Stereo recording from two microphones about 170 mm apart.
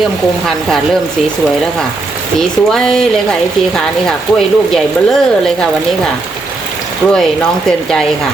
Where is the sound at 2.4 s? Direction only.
5° left (ahead or behind).